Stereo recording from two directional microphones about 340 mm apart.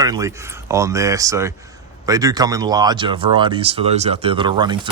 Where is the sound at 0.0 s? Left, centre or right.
Centre.